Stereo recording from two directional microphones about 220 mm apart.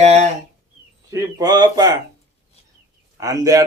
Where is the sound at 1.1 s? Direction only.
20° right (ahead or behind).